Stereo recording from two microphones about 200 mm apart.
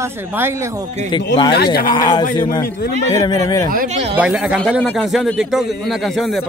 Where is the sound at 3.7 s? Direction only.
45° right (ahead or behind).